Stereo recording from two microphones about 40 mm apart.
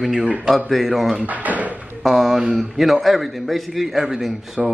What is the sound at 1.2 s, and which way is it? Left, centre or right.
Speech, right.